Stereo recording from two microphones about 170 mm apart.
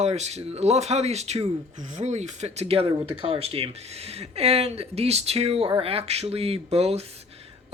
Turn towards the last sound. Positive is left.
turn(degrees=-35)  # may be behind; listen again after turning